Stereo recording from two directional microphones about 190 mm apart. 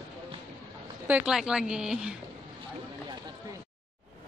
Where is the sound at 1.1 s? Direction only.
5° right (ahead or behind).